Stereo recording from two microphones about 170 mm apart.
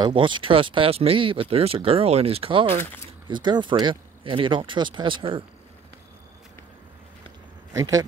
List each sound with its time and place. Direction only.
0.0 s speech: 30° right (ahead or behind)
7.7 s speech: 20° right (ahead or behind)